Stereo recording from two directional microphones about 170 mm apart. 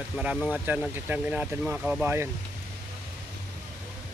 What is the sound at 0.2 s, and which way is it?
Speech, 5° right (ahead or behind).